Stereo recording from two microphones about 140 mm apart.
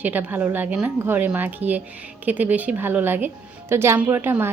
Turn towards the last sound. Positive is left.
turn(degrees=-15)  # may be behind; listen again after turning